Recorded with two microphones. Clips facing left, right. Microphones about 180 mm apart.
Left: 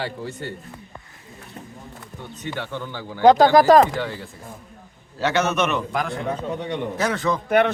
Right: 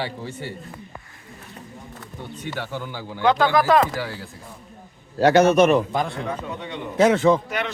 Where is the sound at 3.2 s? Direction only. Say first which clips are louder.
Left 5 dB; 40° left (ahead or behind).